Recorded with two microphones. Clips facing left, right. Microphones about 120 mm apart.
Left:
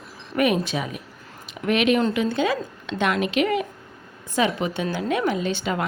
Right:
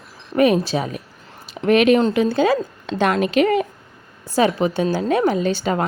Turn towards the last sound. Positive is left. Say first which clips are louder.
# right 5 dB
turn(degrees=-40)  # may be behind; listen again after turning